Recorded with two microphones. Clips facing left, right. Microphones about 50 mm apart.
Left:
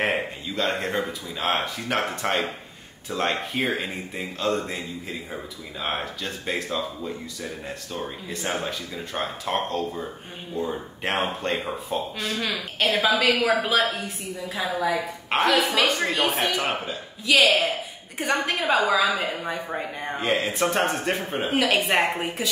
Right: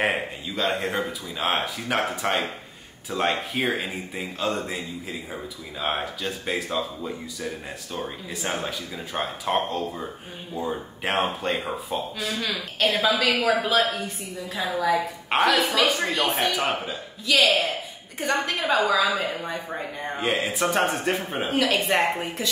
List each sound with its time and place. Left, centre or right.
0.0 s speech: centre
12.4 s a woman's voice: centre
16.0 s a woman's voice: centre
16.3 s a woman's voice: centre
20.2 s a woman's voice: centre